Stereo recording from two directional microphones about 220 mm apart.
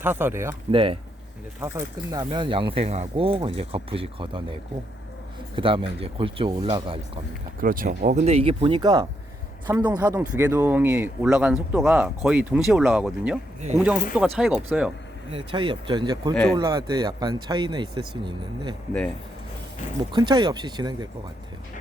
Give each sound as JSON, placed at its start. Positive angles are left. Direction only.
{"t": 0.0, "sound": "speech", "side_deg": -10}
{"t": 0.7, "sound": "speech", "side_deg": -25}
{"t": 5.5, "sound": "speech", "side_deg": -25}
{"t": 7.6, "sound": "speech", "side_deg": -40}
{"t": 15.3, "sound": "speech", "side_deg": -25}
{"t": 16.3, "sound": "speech", "side_deg": 5}
{"t": 16.6, "sound": "speech", "side_deg": -20}
{"t": 20.1, "sound": "speech", "side_deg": -20}